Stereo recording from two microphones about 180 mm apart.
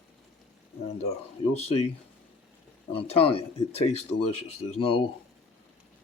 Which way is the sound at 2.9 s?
35° left (ahead or behind).